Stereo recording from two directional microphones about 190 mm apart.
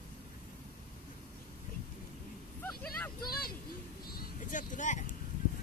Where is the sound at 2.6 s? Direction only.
10° left (ahead or behind).